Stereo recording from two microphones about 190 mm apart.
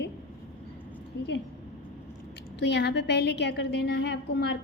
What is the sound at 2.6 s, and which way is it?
A woman's voice, 65° left (ahead or behind).